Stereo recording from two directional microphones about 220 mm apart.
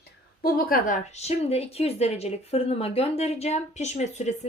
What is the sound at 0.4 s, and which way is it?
A woman's voice, 40° left (ahead or behind).